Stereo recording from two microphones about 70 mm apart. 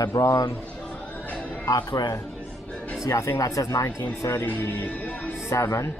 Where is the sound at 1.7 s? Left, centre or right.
Left.